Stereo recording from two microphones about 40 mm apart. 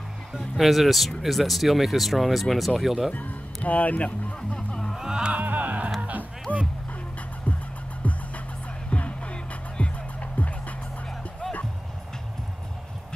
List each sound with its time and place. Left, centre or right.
0.6 s speech: centre
3.2 s speech: left
4.9 s music: centre
5.3 s music: right
6.5 s music: left